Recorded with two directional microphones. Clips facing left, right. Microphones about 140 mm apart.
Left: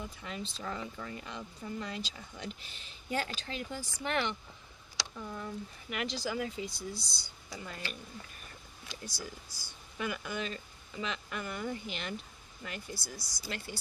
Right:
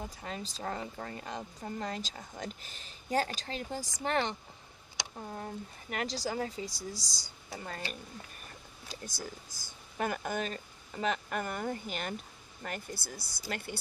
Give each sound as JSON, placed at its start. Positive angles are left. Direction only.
{"t": 0.0, "sound": "speech", "side_deg": -40}
{"t": 5.1, "sound": "speech", "side_deg": -50}
{"t": 5.9, "sound": "speech", "side_deg": -40}
{"t": 8.9, "sound": "speech", "side_deg": -50}